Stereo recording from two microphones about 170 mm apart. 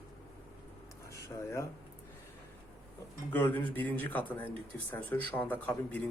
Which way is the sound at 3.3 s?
10° left (ahead or behind).